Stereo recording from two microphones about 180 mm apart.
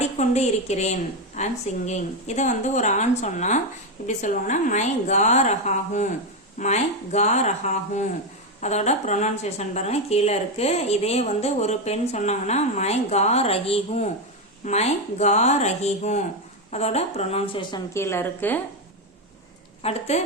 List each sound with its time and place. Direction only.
0.2 s a woman's voice: 40° left (ahead or behind); by 18.6 s 10° left (ahead or behind)
19.8 s a woman's voice: 35° left (ahead or behind)